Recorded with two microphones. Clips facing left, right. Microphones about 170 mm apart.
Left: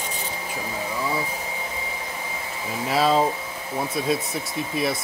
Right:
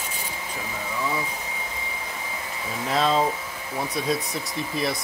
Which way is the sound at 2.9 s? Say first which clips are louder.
Left 2 dB; 5° left (ahead or behind).